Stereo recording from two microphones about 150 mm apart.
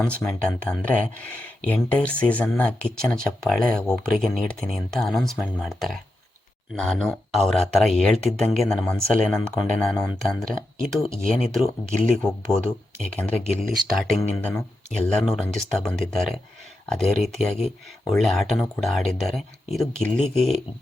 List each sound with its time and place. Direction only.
0.0 s speech: 5° left (ahead or behind)
13.6 s speech: centre (ahead or behind)
15.2 s speech: 5° left (ahead or behind)